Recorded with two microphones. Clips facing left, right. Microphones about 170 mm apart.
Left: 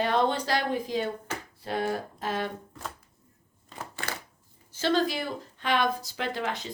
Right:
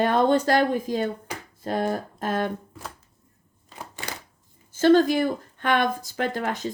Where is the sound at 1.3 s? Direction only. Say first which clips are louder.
Even; 15° right (ahead or behind).